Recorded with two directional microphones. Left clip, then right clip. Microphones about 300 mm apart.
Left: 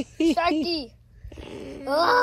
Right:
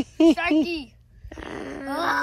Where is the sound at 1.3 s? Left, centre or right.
Centre.